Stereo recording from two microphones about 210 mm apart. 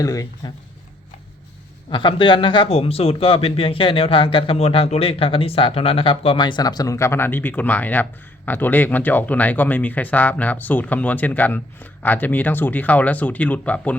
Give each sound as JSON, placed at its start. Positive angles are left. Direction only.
{"t": 0.0, "sound": "speech", "side_deg": 15}
{"t": 1.9, "sound": "speech", "side_deg": 20}